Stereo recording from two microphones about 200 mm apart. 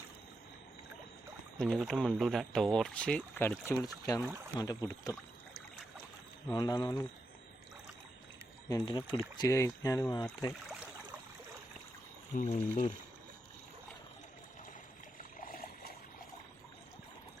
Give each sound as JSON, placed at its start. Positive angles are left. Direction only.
{"t": 1.5, "sound": "speech", "side_deg": 5}
{"t": 6.5, "sound": "speech", "side_deg": 20}
{"t": 8.7, "sound": "speech", "side_deg": 20}
{"t": 12.5, "sound": "speech", "side_deg": 30}
{"t": 15.2, "sound": "boat", "side_deg": 45}